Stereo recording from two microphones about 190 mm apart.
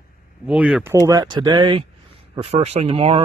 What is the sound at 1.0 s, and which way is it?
Speech, 20° right (ahead or behind).